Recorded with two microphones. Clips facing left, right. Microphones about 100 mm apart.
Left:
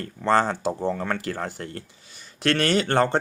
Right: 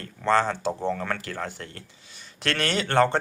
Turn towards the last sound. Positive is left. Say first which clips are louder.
# left 1 dB
turn(degrees=35)  # may be behind; listen again after turning